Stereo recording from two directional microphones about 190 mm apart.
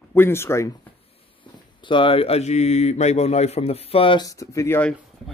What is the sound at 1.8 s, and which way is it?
Speech, 25° left (ahead or behind).